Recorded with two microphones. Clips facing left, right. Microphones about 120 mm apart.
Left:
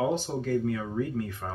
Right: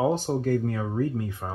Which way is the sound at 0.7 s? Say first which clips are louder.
Right 1 dB; 35° right (ahead or behind).